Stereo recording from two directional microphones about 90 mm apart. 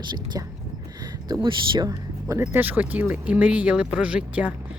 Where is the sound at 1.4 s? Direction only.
60° right (ahead or behind).